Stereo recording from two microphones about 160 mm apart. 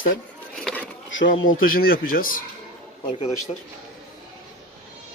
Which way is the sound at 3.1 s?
40° left (ahead or behind).